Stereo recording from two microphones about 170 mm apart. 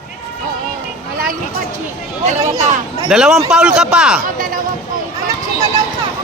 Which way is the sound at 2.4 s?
20° right (ahead or behind).